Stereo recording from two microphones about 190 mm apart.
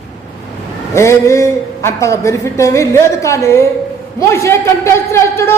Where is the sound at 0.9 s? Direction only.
15° left (ahead or behind).